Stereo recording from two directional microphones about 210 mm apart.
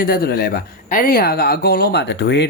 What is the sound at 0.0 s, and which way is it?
Speech, 45° left (ahead or behind).